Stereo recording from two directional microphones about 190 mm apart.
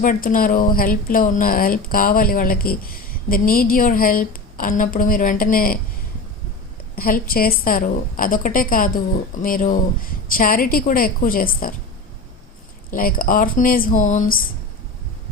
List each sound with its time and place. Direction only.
0.0 s speech: 45° left (ahead or behind)
6.9 s speech: 50° left (ahead or behind)
12.9 s speech: 50° left (ahead or behind)